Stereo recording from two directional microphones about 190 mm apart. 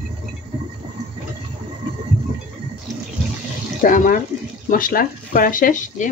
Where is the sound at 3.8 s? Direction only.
45° left (ahead or behind).